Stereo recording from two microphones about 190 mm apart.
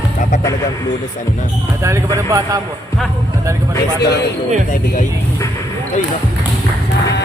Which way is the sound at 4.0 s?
55° left (ahead or behind).